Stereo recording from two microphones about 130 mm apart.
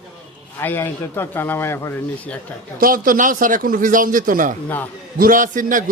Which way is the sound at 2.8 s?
90° right.